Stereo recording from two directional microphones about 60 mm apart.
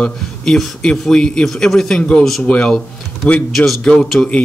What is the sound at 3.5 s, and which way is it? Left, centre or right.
Speech, centre.